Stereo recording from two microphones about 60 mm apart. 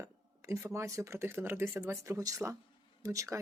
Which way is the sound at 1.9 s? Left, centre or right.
Right.